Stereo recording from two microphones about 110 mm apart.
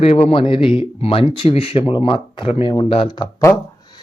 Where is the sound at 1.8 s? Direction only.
50° left (ahead or behind).